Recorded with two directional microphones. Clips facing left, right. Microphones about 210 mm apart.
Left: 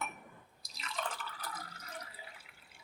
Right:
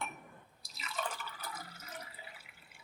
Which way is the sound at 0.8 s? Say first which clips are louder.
Even; 5° right (ahead or behind).